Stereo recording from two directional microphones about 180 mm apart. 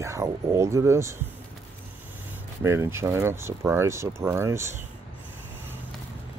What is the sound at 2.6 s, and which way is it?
Speech, 15° right (ahead or behind).